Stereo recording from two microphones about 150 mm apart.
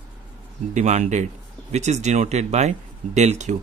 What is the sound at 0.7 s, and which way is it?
Speech, 50° right (ahead or behind).